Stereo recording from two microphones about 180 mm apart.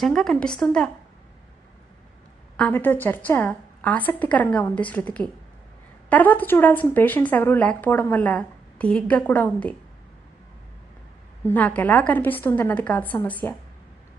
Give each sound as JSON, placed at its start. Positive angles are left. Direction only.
{"t": 0.0, "sound": "a woman's voice", "side_deg": 0}
{"t": 2.6, "sound": "speech", "side_deg": 10}
{"t": 11.4, "sound": "speech", "side_deg": 10}